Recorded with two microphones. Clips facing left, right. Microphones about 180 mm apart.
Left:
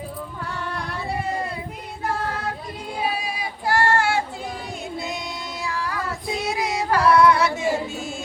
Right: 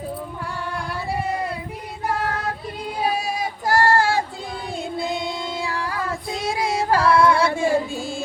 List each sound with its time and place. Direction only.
3.0 s female singing: 45° right (ahead or behind)
4.9 s music: 30° right (ahead or behind)
6.4 s yodeling: 30° right (ahead or behind)